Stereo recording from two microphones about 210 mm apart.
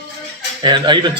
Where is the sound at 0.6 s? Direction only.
20° right (ahead or behind).